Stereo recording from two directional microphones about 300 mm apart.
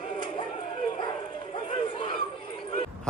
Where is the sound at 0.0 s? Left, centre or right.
Centre.